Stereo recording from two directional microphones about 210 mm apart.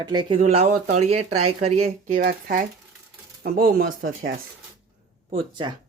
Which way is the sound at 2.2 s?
45° right (ahead or behind).